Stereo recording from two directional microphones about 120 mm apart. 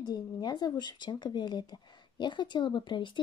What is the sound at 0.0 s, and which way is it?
Speech, 35° left (ahead or behind).